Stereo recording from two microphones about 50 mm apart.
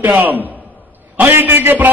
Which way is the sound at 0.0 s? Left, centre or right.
Right.